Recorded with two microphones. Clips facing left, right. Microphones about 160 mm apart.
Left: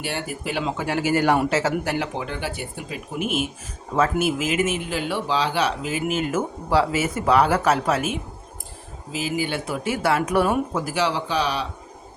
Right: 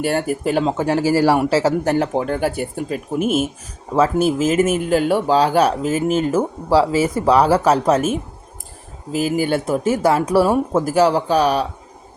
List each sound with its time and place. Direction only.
0.0 s speech: 45° right (ahead or behind)
10.8 s speech: 45° right (ahead or behind)